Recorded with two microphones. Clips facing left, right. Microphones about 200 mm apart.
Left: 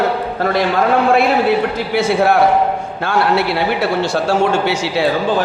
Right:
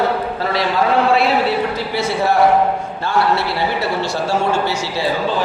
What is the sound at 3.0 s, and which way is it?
A man's voice, 60° left (ahead or behind).